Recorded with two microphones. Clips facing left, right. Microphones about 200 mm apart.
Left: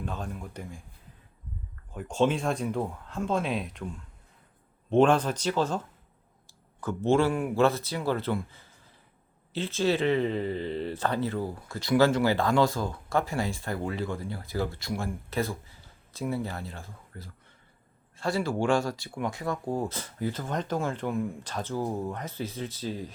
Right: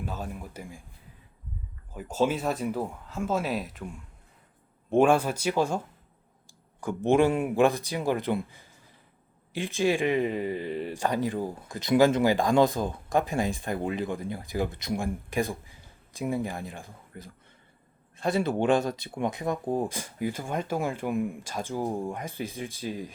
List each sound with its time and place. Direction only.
0.0 s speech: 5° right (ahead or behind)
1.9 s speech: 5° right (ahead or behind)